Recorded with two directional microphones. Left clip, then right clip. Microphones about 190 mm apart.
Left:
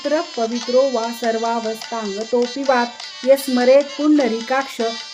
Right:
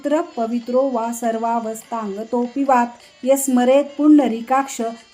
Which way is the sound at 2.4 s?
55° left (ahead or behind).